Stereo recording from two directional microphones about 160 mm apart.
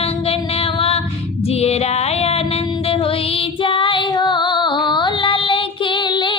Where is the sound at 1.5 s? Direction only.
40° left (ahead or behind).